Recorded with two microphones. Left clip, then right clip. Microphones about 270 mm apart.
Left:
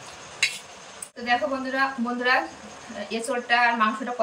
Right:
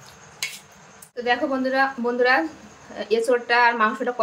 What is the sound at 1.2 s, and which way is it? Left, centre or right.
Speech, centre.